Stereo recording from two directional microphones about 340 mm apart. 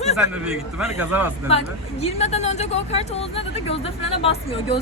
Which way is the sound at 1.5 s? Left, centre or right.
Centre.